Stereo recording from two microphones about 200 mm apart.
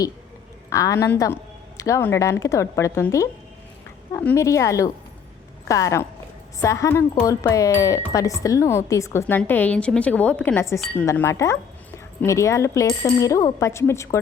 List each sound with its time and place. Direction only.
0.7 s speech: 15° left (ahead or behind)